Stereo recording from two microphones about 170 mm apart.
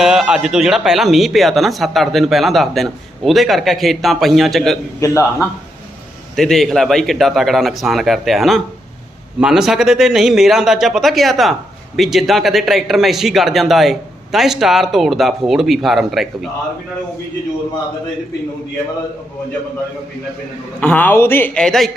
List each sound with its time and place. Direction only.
0.0 s speech: 5° right (ahead or behind)
4.9 s speech: 15° left (ahead or behind)
6.3 s speech: centre (ahead or behind)
20.8 s speech: 10° left (ahead or behind)